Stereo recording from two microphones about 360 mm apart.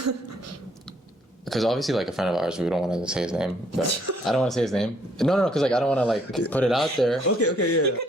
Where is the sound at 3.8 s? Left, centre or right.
Right.